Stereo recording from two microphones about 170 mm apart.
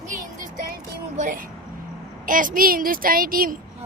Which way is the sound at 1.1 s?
50° right (ahead or behind).